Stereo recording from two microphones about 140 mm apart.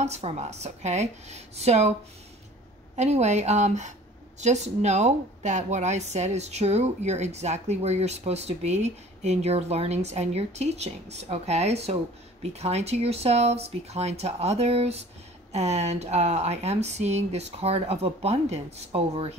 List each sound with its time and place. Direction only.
0.0 s speech: 50° right (ahead or behind)
3.0 s speech: 55° right (ahead or behind)